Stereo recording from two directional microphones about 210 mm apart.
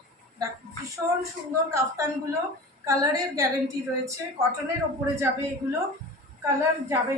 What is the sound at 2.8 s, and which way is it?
Speech, 15° right (ahead or behind).